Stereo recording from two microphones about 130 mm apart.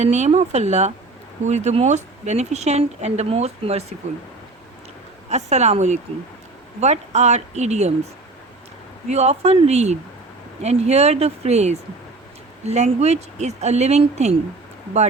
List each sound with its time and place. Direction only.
0.0 s speech: 60° right (ahead or behind)
5.3 s speech: 60° right (ahead or behind)
9.0 s speech: 55° right (ahead or behind)